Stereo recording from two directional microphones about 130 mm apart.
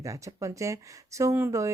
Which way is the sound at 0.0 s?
25° right (ahead or behind).